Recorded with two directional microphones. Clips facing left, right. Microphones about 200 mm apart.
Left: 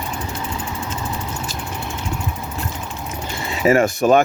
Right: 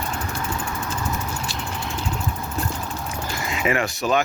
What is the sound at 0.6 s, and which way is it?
Vehicle, 15° left (ahead or behind).